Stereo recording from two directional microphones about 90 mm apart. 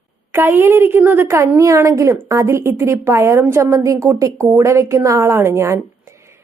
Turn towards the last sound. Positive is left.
turn(degrees=-30)  # may be behind; listen again after turning